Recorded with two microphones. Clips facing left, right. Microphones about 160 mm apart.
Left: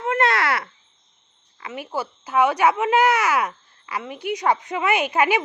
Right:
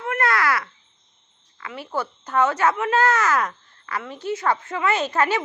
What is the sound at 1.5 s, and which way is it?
Speech, 20° left (ahead or behind).